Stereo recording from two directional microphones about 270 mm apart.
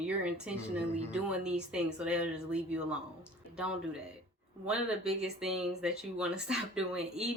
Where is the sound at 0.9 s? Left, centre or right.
Centre.